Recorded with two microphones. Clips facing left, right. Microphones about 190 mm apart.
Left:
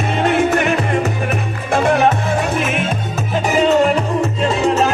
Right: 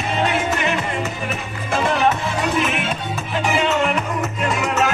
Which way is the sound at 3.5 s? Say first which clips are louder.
Left 7 dB; 40° left (ahead or behind).